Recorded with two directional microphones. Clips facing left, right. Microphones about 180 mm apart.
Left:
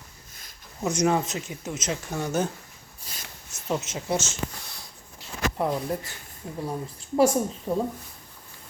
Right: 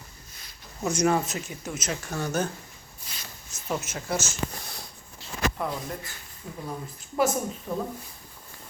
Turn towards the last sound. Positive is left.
turn(degrees=30)  # may be behind; listen again after turning